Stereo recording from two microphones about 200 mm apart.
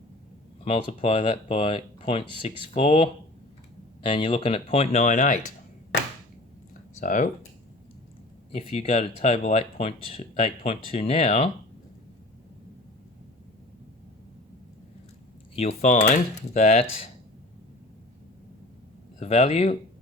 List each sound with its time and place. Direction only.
0.6 s speech: 30° left (ahead or behind)
7.0 s speech: 40° left (ahead or behind)
8.5 s speech: 30° left (ahead or behind)
15.5 s speech: 35° left (ahead or behind)
19.2 s speech: 30° left (ahead or behind)